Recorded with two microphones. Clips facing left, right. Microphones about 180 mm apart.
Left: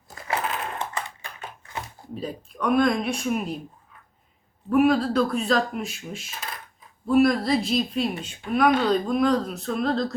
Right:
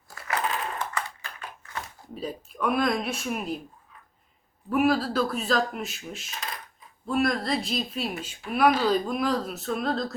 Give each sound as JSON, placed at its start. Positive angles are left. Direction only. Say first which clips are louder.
{"t": 0.1, "sound": "sewing machine", "louder": "left 3 dB", "side_deg": 20}
{"t": 0.8, "sound": "a sound", "louder": "left 1 dB", "side_deg": 25}
{"t": 2.1, "sound": "speech", "louder": "left 1 dB", "side_deg": 0}
{"t": 4.7, "sound": "speech", "louder": "left 4 dB", "side_deg": -5}